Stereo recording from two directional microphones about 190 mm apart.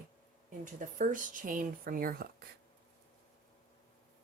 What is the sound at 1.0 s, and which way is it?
Speech, 45° right (ahead or behind).